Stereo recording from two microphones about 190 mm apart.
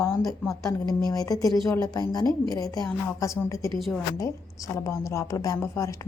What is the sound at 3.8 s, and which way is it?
Speech, centre (ahead or behind).